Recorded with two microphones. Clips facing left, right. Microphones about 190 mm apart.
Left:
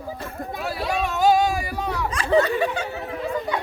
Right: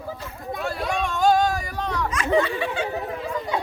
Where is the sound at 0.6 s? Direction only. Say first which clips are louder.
Left 1 dB; 5° left (ahead or behind).